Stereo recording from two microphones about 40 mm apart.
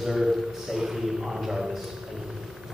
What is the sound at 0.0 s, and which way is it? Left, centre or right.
Speech, centre.